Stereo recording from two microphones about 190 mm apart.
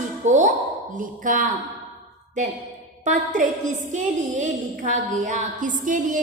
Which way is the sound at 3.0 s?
40° right (ahead or behind).